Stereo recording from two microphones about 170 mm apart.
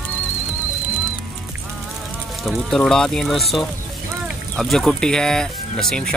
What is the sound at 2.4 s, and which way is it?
Speech, centre (ahead or behind).